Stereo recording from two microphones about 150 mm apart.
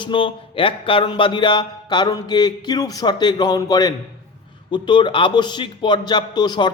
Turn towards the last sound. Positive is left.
turn(degrees=30)  # may be behind; listen again after turning